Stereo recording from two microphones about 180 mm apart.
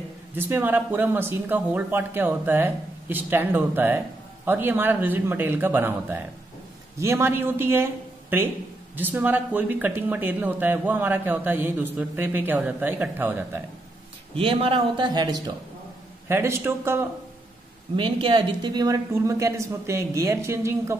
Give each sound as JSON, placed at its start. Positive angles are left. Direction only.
{"t": 0.4, "sound": "a man's voice", "side_deg": -10}
{"t": 14.3, "sound": "speech", "side_deg": -30}
{"t": 17.9, "sound": "speech", "side_deg": -30}